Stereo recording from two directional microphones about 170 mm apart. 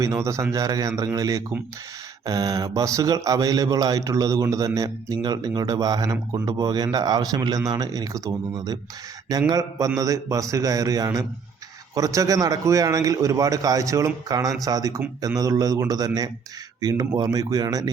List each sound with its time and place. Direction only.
0.0 s speech: 15° right (ahead or behind)